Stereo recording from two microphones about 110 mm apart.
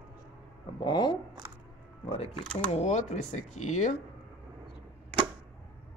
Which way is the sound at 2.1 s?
60° left (ahead or behind).